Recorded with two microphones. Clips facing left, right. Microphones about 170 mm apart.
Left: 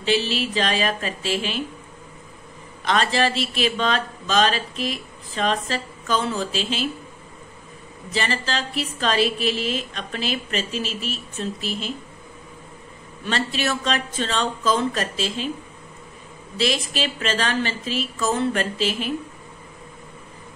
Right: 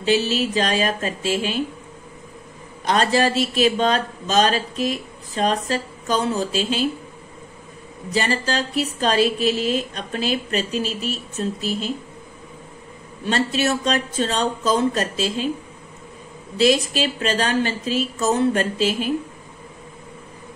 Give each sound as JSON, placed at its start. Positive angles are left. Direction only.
{"t": 0.0, "sound": "speech", "side_deg": -45}
{"t": 2.8, "sound": "speech", "side_deg": -45}
{"t": 8.1, "sound": "speech", "side_deg": -45}
{"t": 13.2, "sound": "speech", "side_deg": -45}
{"t": 16.5, "sound": "speech", "side_deg": -45}